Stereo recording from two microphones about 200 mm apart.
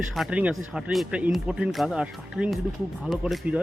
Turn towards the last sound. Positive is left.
turn(degrees=0)  # may be behind; listen again after turning